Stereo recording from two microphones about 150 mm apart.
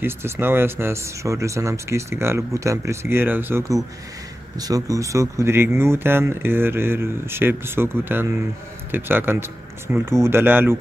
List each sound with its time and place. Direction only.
0.0 s speech: 15° right (ahead or behind)